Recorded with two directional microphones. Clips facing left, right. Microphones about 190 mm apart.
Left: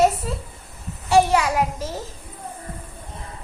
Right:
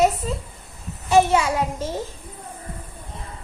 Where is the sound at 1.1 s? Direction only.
25° right (ahead or behind).